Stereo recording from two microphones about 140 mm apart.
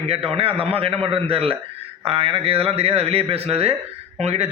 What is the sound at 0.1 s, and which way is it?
A man's voice, 45° right (ahead or behind).